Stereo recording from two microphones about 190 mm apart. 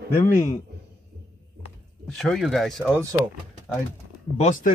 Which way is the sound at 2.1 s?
Centre (ahead or behind).